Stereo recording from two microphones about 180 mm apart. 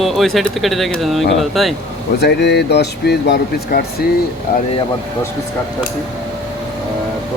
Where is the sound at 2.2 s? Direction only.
70° left (ahead or behind).